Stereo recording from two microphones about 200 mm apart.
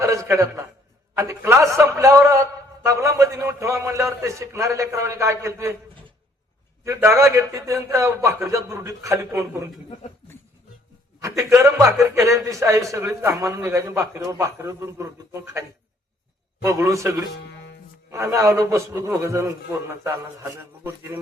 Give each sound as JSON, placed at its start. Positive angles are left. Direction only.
{"t": 0.0, "sound": "a sound", "side_deg": -15}
{"t": 1.1, "sound": "a man's voice", "side_deg": -15}
{"t": 6.8, "sound": "a man's voice", "side_deg": -15}
{"t": 11.2, "sound": "a man's voice", "side_deg": -15}
{"t": 16.6, "sound": "a man's voice", "side_deg": -15}